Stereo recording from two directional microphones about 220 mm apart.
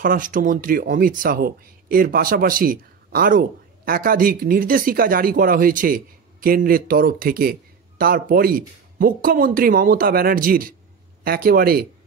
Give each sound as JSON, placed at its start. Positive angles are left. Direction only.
{"t": 0.0, "sound": "speech", "side_deg": -40}